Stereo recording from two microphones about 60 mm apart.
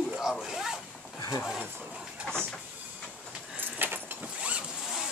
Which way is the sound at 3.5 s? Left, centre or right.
Right.